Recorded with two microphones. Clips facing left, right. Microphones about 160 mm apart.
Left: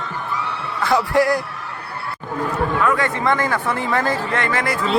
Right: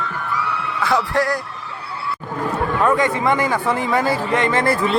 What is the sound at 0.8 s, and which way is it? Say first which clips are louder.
Speech: left 3 dB; 5° left (ahead or behind).